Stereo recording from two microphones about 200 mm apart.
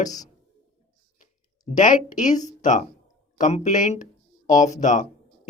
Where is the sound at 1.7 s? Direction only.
40° left (ahead or behind).